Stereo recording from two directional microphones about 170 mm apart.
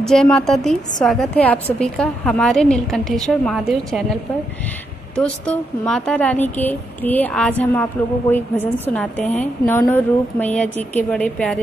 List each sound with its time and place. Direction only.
0.0 s a woman's voice: 5° left (ahead or behind)
5.1 s speech: 5° left (ahead or behind)
8.8 s speech: 5° left (ahead or behind)